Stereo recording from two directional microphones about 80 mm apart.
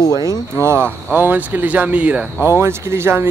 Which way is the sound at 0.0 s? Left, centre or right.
Left.